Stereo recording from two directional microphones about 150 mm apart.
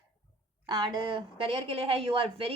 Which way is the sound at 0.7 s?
30° right (ahead or behind).